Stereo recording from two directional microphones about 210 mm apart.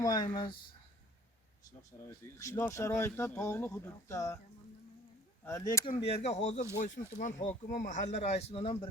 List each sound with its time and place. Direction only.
0.0 s speech: 20° left (ahead or behind)
2.0 s speech: 15° left (ahead or behind)
5.5 s speech: 15° left (ahead or behind)
6.1 s speech: 30° left (ahead or behind)